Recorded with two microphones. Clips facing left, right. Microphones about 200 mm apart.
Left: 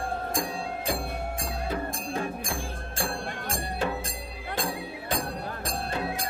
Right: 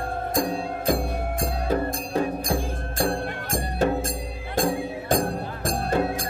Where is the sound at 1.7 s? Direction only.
40° right (ahead or behind).